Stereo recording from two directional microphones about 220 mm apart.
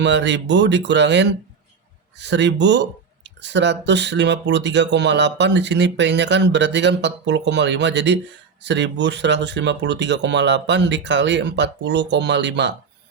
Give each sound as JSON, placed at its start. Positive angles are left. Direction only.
{"t": 0.0, "sound": "speech", "side_deg": -55}